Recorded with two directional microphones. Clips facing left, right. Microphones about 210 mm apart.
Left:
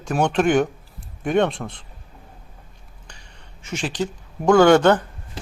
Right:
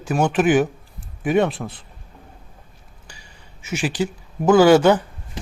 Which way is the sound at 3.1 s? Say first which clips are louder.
Right 1 dB; 5° right (ahead or behind).